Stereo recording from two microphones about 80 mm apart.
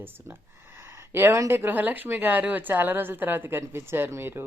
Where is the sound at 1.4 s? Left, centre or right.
Right.